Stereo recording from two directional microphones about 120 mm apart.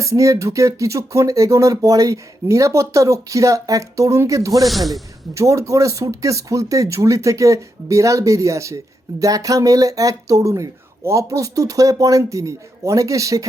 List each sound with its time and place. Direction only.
0.0 s speech: 25° right (ahead or behind)
4.6 s speech: centre (ahead or behind)
5.3 s speech: 25° right (ahead or behind)